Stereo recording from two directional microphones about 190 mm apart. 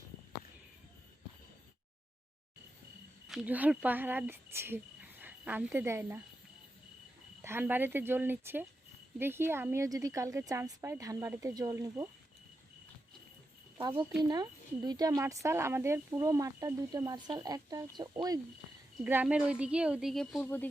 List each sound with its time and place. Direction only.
3.2 s speech: 5° right (ahead or behind)
7.4 s speech: 10° right (ahead or behind)
13.7 s speech: 25° right (ahead or behind)
19.0 s a woman's voice: 10° right (ahead or behind)
20.4 s speech: 10° left (ahead or behind)